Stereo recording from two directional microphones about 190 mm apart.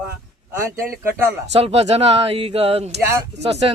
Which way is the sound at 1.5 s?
35° right (ahead or behind).